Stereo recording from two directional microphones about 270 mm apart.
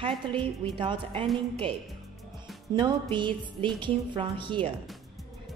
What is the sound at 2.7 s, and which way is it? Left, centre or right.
Music, centre.